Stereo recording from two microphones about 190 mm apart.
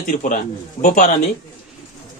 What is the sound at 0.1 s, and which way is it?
Speech, 45° left (ahead or behind).